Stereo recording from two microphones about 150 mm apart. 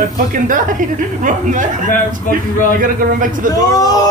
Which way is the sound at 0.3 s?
60° right (ahead or behind).